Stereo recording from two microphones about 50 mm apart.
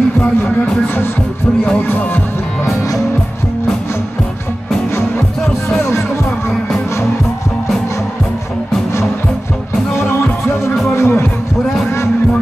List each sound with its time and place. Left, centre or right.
11.0 s music: left